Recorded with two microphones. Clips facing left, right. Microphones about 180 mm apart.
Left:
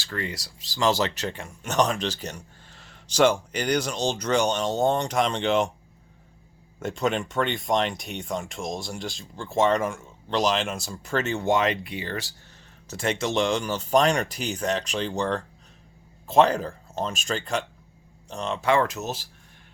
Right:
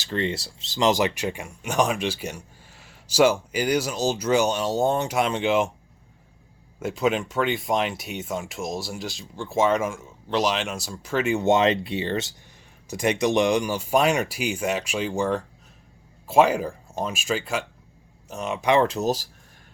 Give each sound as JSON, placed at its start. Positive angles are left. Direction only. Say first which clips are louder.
{"t": 0.0, "sound": "speech", "louder": "right 6 dB", "side_deg": -25}
{"t": 6.7, "sound": "speech", "louder": "right 2 dB", "side_deg": -5}
{"t": 11.4, "sound": "speech", "louder": "right 5 dB", "side_deg": -25}
{"t": 12.9, "sound": "speech", "louder": "right 4 dB", "side_deg": -15}